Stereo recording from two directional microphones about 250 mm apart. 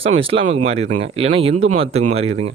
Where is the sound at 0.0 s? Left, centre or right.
Right.